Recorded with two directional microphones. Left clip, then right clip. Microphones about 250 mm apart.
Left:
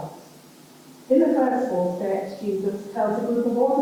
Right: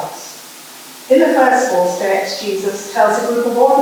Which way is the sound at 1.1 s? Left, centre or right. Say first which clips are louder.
Right 9 dB; centre.